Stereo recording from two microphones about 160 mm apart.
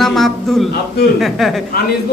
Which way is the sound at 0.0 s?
Centre (ahead or behind).